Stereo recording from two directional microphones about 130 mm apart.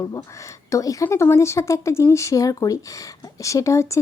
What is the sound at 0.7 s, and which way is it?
Speech, 25° left (ahead or behind).